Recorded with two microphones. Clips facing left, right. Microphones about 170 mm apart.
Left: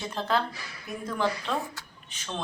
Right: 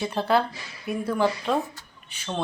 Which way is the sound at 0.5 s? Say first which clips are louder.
Right 8 dB; 25° right (ahead or behind).